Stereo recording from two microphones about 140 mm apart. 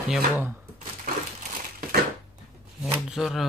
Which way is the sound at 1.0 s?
75° right (ahead or behind).